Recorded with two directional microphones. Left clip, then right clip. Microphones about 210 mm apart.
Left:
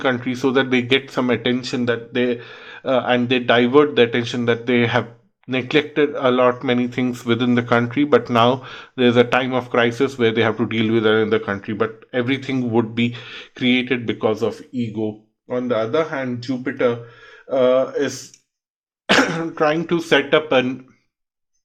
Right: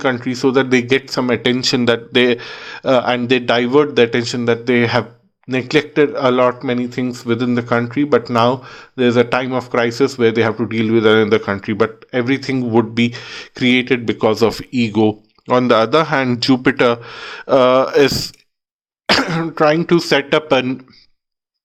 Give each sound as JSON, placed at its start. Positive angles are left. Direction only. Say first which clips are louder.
{"t": 0.0, "sound": "speech", "louder": "right 3 dB", "side_deg": -15}
{"t": 19.0, "sound": "speech", "louder": "right 1 dB", "side_deg": -25}